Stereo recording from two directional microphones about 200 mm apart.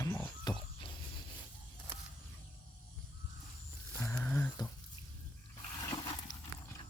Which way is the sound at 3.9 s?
15° left (ahead or behind).